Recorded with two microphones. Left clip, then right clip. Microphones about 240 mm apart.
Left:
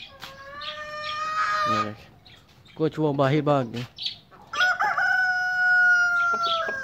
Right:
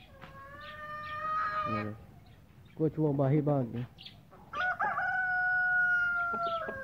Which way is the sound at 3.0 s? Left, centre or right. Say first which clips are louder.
Left 8 dB; left.